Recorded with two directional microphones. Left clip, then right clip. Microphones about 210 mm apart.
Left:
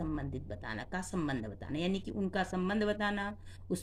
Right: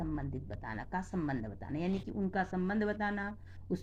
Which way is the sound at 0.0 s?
40° left (ahead or behind).